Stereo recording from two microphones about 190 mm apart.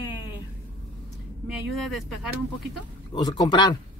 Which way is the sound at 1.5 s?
Centre (ahead or behind).